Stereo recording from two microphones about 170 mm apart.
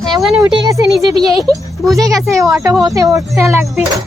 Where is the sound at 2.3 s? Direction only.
20° right (ahead or behind).